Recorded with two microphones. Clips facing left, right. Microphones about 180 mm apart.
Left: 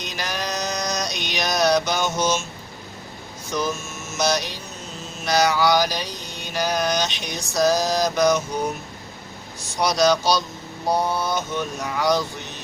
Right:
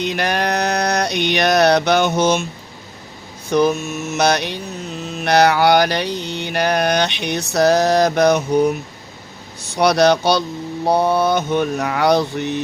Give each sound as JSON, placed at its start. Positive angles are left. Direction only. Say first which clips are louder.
{"t": 0.0, "sound": "a sound", "louder": "right 9 dB", "side_deg": -60}
{"t": 3.5, "sound": "mantra", "louder": "right 10 dB", "side_deg": -60}
{"t": 9.6, "sound": "speech", "louder": "right 6 dB", "side_deg": -65}
{"t": 10.8, "sound": "mantra", "louder": "right 7 dB", "side_deg": -65}